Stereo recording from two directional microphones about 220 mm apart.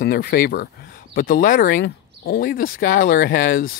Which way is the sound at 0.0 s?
45° left (ahead or behind).